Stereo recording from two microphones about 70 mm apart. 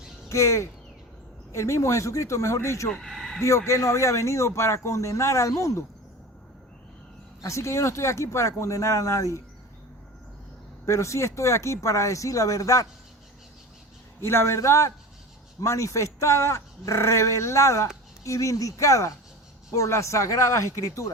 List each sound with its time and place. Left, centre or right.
0.3 s speech: left
2.9 s speech: centre
3.4 s speech: left
7.4 s speech: left
10.8 s speech: left
14.2 s speech: left